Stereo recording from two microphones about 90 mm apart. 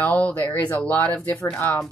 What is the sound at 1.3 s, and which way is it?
Speech, 10° left (ahead or behind).